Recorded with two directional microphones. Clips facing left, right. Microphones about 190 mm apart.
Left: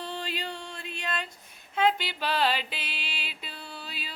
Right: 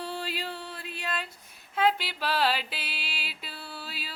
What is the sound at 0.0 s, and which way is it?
Music, 5° right (ahead or behind).